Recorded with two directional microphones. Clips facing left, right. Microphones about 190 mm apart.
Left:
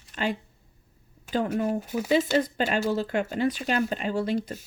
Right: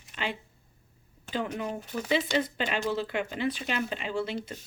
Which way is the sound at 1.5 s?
45° left (ahead or behind).